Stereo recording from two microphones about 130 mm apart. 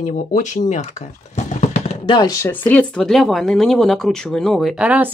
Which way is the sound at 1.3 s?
65° left (ahead or behind).